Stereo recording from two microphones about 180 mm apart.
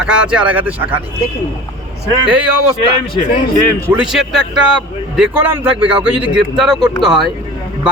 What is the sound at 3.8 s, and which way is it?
A man's voice, 5° right (ahead or behind).